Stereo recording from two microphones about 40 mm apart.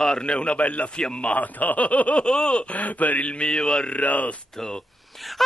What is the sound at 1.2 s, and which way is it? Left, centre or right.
A man's voice, left.